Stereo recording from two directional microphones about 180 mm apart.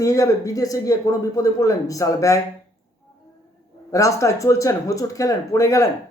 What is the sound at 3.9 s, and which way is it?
A man's voice, 15° left (ahead or behind).